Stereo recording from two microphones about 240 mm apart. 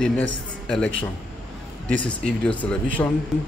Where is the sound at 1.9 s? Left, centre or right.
Centre.